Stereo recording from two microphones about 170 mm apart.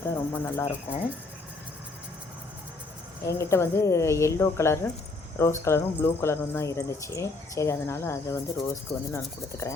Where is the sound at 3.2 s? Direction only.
15° left (ahead or behind).